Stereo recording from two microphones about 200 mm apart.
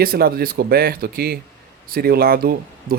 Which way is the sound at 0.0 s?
50° right (ahead or behind).